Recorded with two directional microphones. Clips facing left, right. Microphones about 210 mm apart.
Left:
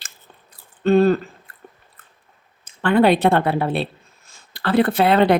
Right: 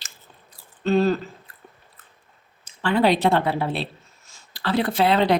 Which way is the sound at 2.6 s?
55° left (ahead or behind).